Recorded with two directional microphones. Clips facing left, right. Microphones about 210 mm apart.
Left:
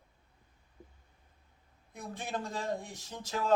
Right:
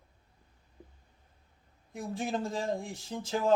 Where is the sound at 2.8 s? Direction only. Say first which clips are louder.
Right 6 dB; 30° right (ahead or behind).